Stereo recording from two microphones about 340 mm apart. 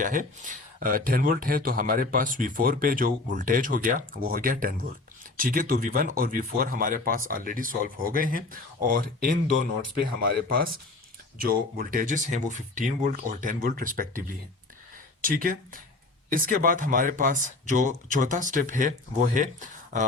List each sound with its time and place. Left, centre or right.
0.0 s speech: right